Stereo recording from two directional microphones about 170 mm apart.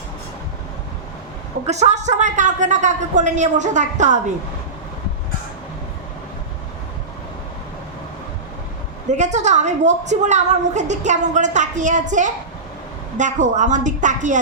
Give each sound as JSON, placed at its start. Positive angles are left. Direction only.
{"t": 1.6, "sound": "a woman's voice", "side_deg": -40}
{"t": 9.1, "sound": "a woman's voice", "side_deg": -45}